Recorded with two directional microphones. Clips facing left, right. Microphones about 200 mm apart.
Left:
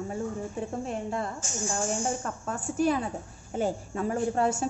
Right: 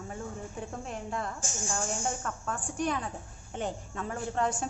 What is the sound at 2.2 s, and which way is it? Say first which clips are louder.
Speech: left 3 dB; 25° left (ahead or behind).